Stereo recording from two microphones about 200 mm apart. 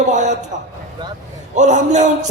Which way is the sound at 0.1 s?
35° right (ahead or behind).